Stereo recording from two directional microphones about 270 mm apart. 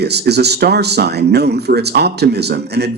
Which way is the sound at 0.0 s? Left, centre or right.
Right.